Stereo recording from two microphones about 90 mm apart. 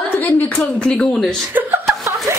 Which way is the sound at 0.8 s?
10° left (ahead or behind).